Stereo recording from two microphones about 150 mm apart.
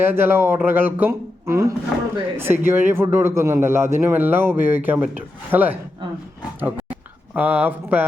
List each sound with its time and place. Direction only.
0.0 s a man's voice: 15° right (ahead or behind)
1.9 s speech: 5° left (ahead or behind)
2.4 s a man's voice: 15° right (ahead or behind)
6.6 s a sound: 10° right (ahead or behind)
7.3 s a man's voice: 10° right (ahead or behind)